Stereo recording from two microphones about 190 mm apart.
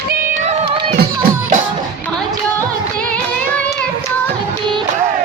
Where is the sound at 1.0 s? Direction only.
50° right (ahead or behind).